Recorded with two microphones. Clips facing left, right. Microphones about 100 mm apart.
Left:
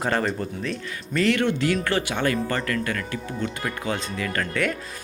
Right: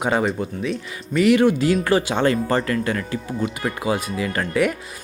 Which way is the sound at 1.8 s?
20° right (ahead or behind).